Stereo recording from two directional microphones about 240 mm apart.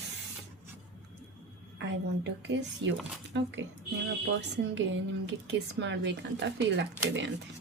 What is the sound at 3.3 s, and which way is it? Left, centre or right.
A woman's voice, right.